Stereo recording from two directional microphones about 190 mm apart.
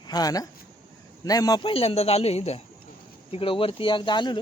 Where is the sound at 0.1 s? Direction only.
20° left (ahead or behind).